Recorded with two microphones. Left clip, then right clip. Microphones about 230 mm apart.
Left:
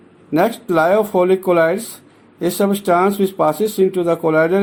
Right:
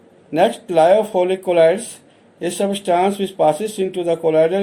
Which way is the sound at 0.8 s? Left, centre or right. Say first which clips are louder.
Even; left.